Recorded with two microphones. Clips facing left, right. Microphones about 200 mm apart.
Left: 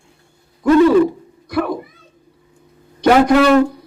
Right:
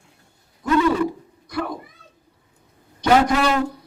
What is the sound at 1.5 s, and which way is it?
Speech, 65° left (ahead or behind).